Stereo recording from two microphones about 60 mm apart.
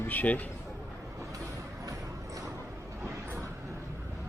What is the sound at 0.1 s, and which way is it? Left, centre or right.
Speech, left.